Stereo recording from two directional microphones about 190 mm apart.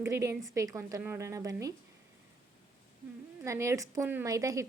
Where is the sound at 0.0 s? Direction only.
15° right (ahead or behind).